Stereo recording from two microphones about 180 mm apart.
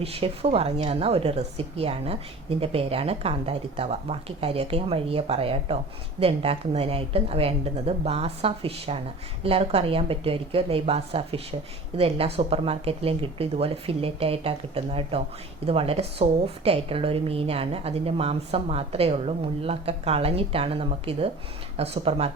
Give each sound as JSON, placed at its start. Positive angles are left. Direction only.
{"t": 0.0, "sound": "a woman's voice", "side_deg": -35}